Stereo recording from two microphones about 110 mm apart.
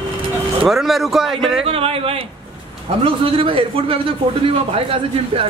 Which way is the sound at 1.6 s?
60° right (ahead or behind).